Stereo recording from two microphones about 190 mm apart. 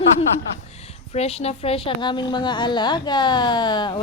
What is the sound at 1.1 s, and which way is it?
A woman's voice, 35° left (ahead or behind).